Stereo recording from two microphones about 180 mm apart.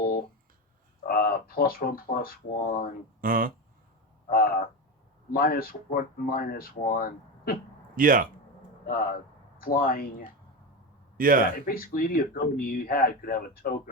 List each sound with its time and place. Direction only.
1.0 s speech: 55° left (ahead or behind)
3.2 s speech: 50° right (ahead or behind)
4.3 s speech: 55° left (ahead or behind)
7.9 s speech: 50° right (ahead or behind)
8.9 s speech: 55° left (ahead or behind)
11.2 s speech: 50° right (ahead or behind)
11.5 s speech: 55° left (ahead or behind)